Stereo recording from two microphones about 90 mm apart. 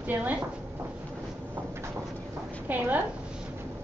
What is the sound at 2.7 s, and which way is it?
Speech, 20° right (ahead or behind).